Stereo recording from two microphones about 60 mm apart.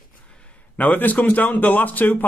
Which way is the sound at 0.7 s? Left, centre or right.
Left.